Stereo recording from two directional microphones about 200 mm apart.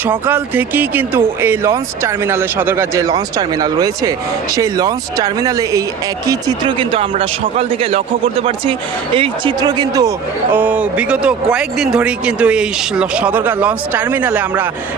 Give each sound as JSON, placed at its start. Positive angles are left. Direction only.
{"t": 0.0, "sound": "a man's voice", "side_deg": -10}
{"t": 10.5, "sound": "a man's voice", "side_deg": -10}